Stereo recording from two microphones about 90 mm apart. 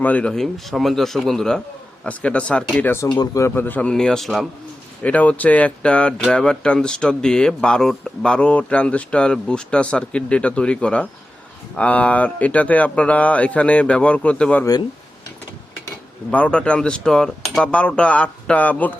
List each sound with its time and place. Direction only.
0.0 s speech: 15° left (ahead or behind)
0.3 s speech: 5° left (ahead or behind)
5.0 s speech: 15° left (ahead or behind)
16.3 s speech: 15° left (ahead or behind)